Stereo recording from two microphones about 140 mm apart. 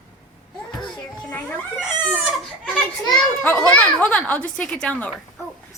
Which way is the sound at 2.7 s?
Centre (ahead or behind).